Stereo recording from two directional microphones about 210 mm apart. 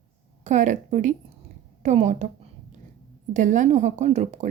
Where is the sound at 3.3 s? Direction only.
35° right (ahead or behind).